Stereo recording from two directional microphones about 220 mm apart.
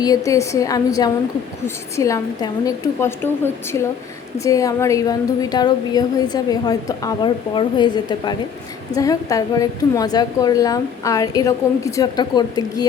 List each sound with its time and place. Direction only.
0.3 s a woman's voice: 15° left (ahead or behind)